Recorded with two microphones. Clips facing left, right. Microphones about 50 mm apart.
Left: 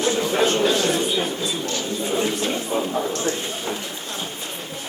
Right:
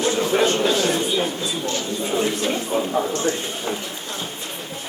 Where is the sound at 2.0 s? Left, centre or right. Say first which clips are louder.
Right 1 dB; centre.